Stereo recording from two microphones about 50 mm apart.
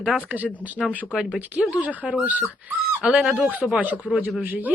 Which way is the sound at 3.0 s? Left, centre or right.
Right.